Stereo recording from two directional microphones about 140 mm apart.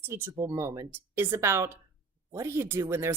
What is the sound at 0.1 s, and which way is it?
A woman's voice, 20° right (ahead or behind).